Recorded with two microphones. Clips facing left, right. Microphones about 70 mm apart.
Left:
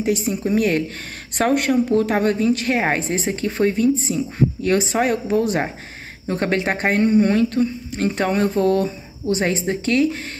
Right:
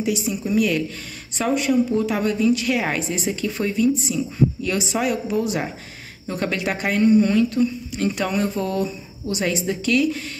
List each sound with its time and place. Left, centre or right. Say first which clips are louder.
0.0 s speech: left 3 dB; left
1.4 s speech: left 2 dB; left